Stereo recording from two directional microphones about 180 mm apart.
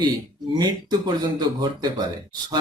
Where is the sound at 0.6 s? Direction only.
25° right (ahead or behind).